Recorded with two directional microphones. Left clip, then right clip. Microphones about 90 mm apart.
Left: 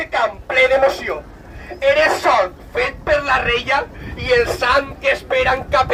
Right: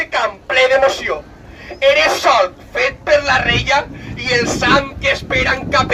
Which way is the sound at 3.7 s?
20° right (ahead or behind).